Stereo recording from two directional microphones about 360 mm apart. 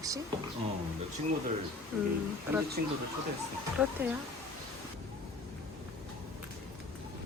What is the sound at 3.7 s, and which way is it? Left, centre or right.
Speech, centre.